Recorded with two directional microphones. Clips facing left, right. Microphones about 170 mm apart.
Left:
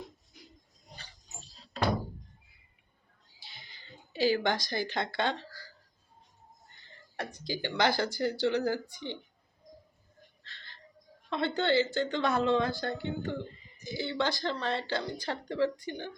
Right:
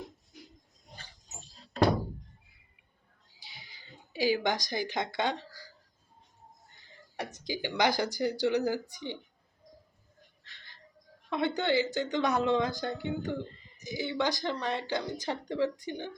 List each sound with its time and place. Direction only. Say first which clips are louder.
3.4 s a sound: even; 10° right (ahead or behind)
7.4 s speech: even; 15° right (ahead or behind)
10.4 s music: left 4 dB; 15° right (ahead or behind)
11.3 s speech: even; 15° right (ahead or behind)